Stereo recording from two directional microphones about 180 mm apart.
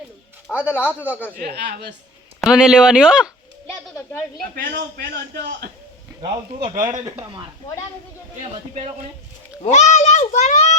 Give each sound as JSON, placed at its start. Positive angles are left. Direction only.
{"t": 0.5, "sound": "a man's voice", "side_deg": 10}
{"t": 1.4, "sound": "a man's voice", "side_deg": -60}
{"t": 2.5, "sound": "speech", "side_deg": -5}
{"t": 4.5, "sound": "a man's voice", "side_deg": -60}
{"t": 6.2, "sound": "speech", "side_deg": -25}
{"t": 9.6, "sound": "a child's voice", "side_deg": 40}